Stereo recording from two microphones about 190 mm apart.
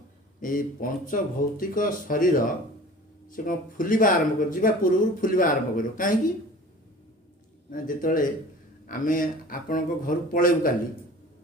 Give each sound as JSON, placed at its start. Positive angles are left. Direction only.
{"t": 0.3, "sound": "speech", "side_deg": 45}
{"t": 7.7, "sound": "speech", "side_deg": 45}